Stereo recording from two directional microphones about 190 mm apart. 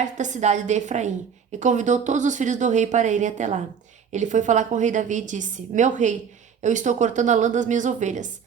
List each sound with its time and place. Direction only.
0.0 s speech: 40° right (ahead or behind)